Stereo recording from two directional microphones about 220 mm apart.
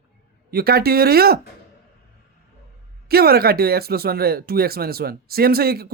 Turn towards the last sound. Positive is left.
turn(degrees=-45)  # may be behind; listen again after turning